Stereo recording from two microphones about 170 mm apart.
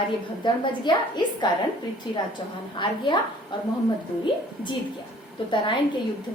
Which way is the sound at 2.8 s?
30° left (ahead or behind).